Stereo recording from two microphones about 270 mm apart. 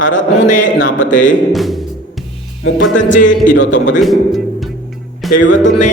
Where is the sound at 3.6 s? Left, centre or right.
Left.